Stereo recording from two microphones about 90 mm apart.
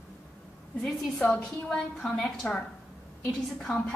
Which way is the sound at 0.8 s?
5° left (ahead or behind).